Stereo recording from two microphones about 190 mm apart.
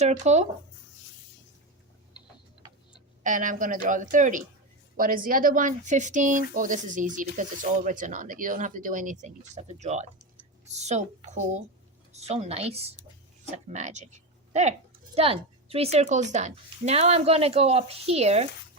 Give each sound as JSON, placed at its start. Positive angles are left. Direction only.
{"t": 0.0, "sound": "speech", "side_deg": -40}
{"t": 3.2, "sound": "speech", "side_deg": -45}